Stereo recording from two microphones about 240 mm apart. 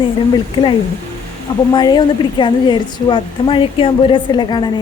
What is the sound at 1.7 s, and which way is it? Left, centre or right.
A woman's voice, centre.